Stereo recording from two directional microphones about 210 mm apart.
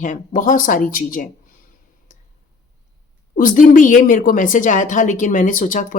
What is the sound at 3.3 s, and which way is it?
Speech, 40° left (ahead or behind).